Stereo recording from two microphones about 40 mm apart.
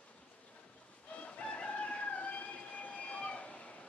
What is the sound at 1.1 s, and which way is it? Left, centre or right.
Fowl, left.